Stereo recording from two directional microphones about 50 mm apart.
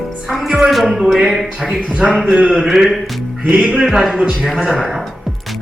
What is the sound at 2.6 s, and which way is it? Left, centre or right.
Speech, centre.